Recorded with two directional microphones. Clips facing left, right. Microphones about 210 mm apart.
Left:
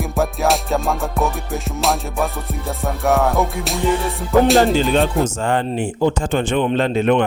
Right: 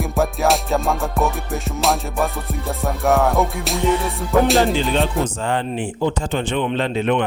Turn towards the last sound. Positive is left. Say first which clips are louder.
# left 3 dB
turn(degrees=45)  # may be behind; listen again after turning